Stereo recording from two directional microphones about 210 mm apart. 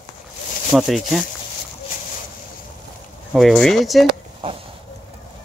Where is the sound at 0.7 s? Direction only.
Centre (ahead or behind).